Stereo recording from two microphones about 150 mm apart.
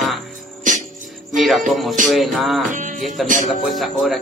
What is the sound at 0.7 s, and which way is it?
Music, 60° right (ahead or behind).